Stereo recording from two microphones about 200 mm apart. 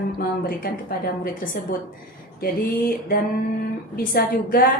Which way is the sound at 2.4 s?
50° left (ahead or behind).